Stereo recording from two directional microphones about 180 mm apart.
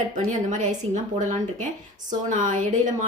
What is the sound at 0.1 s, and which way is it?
A woman's voice, 45° right (ahead or behind).